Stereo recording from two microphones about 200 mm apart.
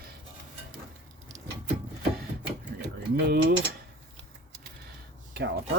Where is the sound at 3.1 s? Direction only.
50° right (ahead or behind).